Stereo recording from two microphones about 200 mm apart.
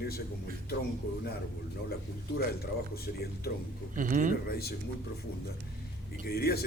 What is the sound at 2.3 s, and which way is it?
Speech, 50° left (ahead or behind).